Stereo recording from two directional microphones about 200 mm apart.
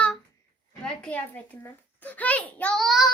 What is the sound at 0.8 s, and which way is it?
A woman's voice, 5° left (ahead or behind).